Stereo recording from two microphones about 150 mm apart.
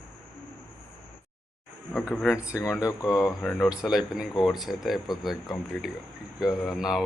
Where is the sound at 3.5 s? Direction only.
Centre (ahead or behind).